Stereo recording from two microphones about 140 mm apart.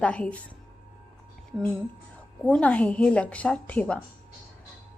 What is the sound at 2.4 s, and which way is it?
A woman's voice, 10° left (ahead or behind).